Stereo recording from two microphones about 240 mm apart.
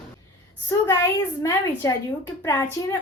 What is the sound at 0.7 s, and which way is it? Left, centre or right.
Speech, centre.